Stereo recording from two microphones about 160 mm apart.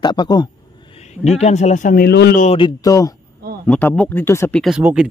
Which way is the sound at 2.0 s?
85° left.